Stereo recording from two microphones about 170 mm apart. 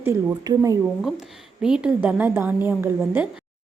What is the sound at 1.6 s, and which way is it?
A woman's voice, 5° right (ahead or behind).